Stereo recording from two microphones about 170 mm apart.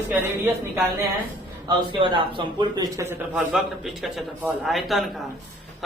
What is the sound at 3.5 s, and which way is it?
A man's voice, centre (ahead or behind).